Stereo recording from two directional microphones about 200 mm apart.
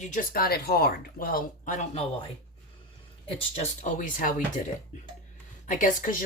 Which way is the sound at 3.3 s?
30° left (ahead or behind).